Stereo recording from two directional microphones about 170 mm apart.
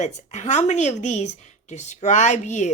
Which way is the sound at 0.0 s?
45° left (ahead or behind).